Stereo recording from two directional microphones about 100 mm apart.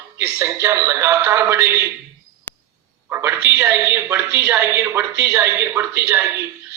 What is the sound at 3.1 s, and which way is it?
A man's voice, 25° right (ahead or behind).